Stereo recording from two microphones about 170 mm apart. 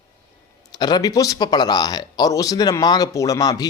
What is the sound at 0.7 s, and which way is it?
Speech, 25° left (ahead or behind).